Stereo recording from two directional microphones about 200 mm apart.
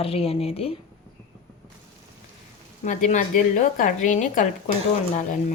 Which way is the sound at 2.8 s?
40° left (ahead or behind).